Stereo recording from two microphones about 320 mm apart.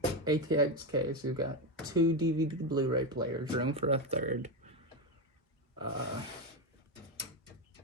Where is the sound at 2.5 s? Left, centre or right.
Centre.